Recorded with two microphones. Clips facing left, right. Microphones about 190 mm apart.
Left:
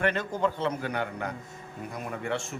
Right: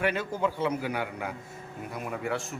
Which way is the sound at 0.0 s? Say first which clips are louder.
Left 1 dB; 10° right (ahead or behind).